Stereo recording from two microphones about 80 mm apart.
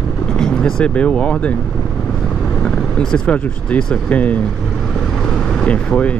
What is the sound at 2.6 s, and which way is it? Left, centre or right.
Speech, centre.